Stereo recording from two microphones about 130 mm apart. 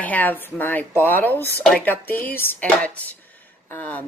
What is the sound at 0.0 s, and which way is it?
Speech, 15° left (ahead or behind).